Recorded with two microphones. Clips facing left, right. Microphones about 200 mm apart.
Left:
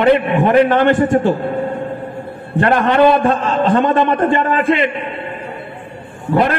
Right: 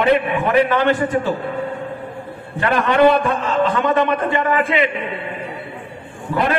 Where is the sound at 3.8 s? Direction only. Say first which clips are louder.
Left 3 dB; 50° left (ahead or behind).